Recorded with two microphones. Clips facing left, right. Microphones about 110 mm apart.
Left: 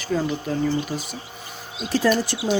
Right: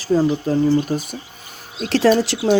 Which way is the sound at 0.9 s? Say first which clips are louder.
Right 6 dB; 50° right (ahead or behind).